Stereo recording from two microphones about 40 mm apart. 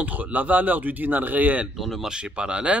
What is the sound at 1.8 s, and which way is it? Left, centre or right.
Speech, centre.